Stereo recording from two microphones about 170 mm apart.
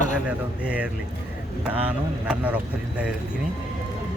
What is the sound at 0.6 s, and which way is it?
Speech, 10° right (ahead or behind).